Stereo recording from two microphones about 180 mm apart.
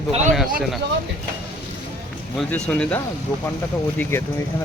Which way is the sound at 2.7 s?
5° left (ahead or behind).